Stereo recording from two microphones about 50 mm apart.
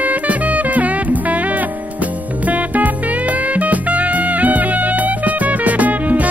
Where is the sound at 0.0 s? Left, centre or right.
Right.